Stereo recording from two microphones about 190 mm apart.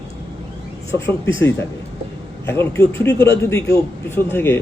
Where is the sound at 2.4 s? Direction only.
10° left (ahead or behind).